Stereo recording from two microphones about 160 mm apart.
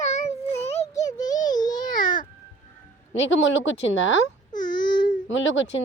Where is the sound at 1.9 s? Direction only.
55° left (ahead or behind).